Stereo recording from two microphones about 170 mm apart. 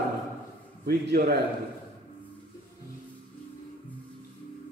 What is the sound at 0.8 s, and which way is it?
Speech, 65° right (ahead or behind).